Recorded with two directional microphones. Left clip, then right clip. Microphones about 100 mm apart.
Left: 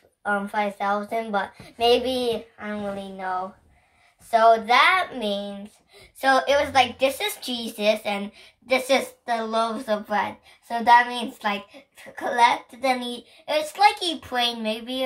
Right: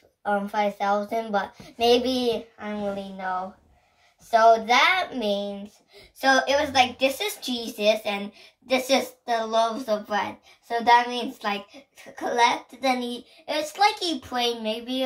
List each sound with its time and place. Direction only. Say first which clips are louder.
0.2 s a woman's voice: even; 35° right (ahead or behind)